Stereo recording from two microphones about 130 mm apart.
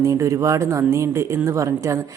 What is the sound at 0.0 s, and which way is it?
Speech, 25° right (ahead or behind).